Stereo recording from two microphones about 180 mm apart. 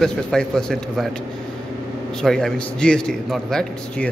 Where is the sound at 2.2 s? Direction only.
5° left (ahead or behind).